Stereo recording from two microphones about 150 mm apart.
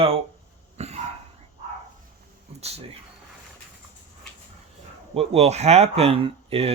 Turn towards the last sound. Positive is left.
turn(degrees=-40)  # may be behind; listen again after turning